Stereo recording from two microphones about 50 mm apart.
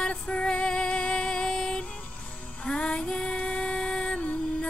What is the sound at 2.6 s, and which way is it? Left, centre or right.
Female singing, centre.